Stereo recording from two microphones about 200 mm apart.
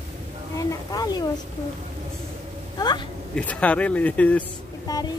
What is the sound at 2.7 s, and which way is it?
Speech, 20° left (ahead or behind).